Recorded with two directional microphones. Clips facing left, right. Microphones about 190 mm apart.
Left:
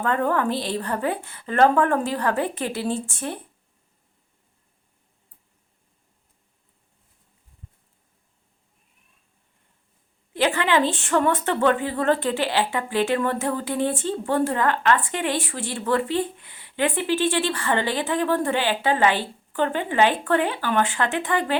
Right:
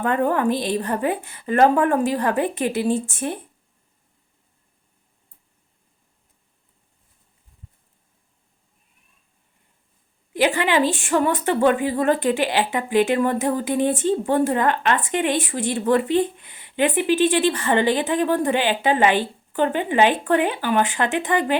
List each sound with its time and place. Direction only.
0.0 s a woman's voice: 15° right (ahead or behind)
10.3 s a woman's voice: 15° right (ahead or behind)